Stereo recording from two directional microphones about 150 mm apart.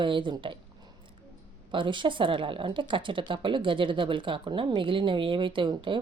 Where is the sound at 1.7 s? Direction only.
35° right (ahead or behind).